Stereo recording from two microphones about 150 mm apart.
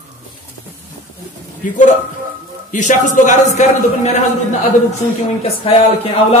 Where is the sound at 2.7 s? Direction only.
55° left (ahead or behind).